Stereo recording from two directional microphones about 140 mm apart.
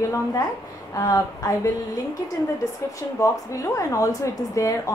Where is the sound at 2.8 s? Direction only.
20° left (ahead or behind).